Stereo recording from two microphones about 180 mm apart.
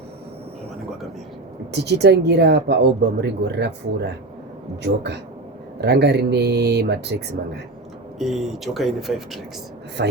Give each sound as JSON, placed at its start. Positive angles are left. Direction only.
{"t": 1.7, "sound": "speech", "side_deg": -70}
{"t": 4.8, "sound": "speech", "side_deg": -70}
{"t": 8.2, "sound": "speech", "side_deg": 0}
{"t": 10.0, "sound": "speech", "side_deg": -70}